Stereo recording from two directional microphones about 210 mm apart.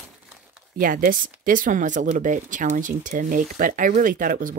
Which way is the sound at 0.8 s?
40° right (ahead or behind).